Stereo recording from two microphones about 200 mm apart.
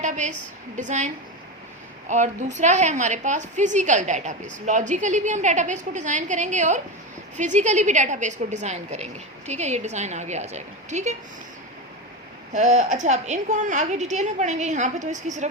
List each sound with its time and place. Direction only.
0.0 s a woman's voice: 35° right (ahead or behind)
12.5 s a woman's voice: 35° right (ahead or behind)